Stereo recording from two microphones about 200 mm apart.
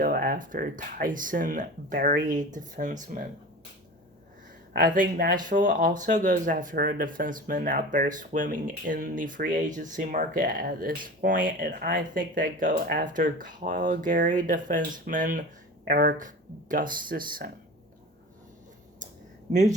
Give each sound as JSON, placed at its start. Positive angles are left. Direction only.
{"t": 0.0, "sound": "speech", "side_deg": -45}
{"t": 4.7, "sound": "speech", "side_deg": -45}